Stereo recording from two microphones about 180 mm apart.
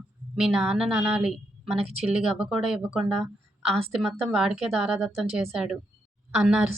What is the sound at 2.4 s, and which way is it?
A woman's voice, centre (ahead or behind).